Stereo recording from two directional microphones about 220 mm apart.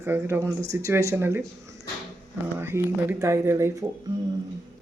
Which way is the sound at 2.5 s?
10° right (ahead or behind).